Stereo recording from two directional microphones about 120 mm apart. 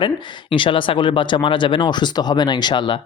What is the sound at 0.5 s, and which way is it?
Speech, 45° left (ahead or behind).